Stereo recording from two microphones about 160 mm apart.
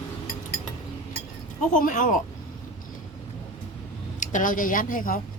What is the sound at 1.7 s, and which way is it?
Speech, 55° left (ahead or behind).